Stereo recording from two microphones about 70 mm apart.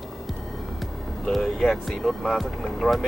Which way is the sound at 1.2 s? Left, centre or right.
Centre.